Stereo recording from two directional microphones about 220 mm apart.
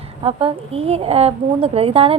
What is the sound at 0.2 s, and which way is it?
A woman's voice, 25° right (ahead or behind).